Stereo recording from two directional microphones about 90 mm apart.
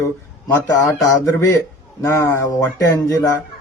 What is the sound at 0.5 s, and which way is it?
Speech, 35° left (ahead or behind).